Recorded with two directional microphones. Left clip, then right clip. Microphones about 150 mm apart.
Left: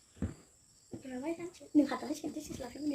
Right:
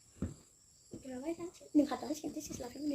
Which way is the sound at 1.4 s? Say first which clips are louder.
Left 1 dB; 30° left (ahead or behind).